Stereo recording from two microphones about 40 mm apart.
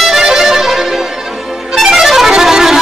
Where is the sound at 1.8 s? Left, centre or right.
Centre.